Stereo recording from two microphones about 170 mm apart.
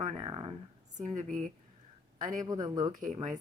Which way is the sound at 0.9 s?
45° right (ahead or behind).